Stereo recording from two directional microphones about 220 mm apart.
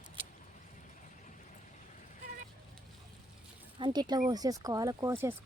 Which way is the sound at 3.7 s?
20° right (ahead or behind).